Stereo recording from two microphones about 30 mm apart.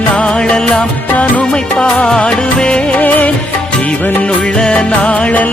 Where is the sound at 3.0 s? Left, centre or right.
Left.